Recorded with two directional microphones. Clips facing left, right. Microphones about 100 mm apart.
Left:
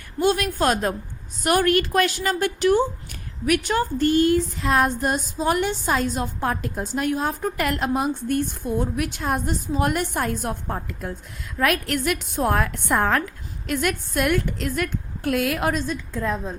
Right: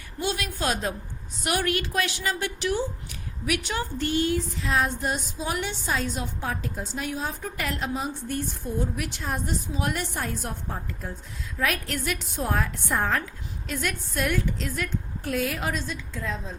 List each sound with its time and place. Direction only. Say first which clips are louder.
0.2 s a woman's voice: left 8 dB; 50° left (ahead or behind)